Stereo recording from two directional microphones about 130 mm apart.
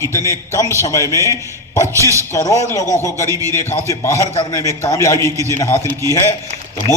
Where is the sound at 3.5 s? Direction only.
20° left (ahead or behind).